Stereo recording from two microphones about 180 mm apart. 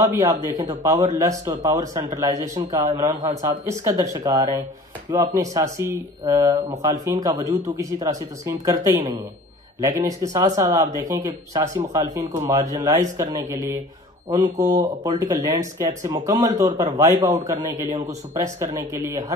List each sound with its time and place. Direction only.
0.0 s speech: 15° right (ahead or behind)